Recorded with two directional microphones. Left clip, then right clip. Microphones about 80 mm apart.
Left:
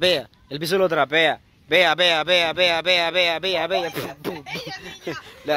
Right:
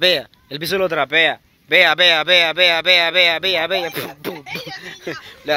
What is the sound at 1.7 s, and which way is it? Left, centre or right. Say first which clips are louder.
Speech: right 5 dB; left.